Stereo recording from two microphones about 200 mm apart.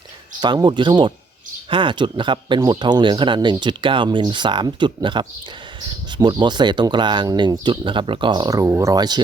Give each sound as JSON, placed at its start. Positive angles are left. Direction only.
{"t": 0.3, "sound": "speech", "side_deg": -20}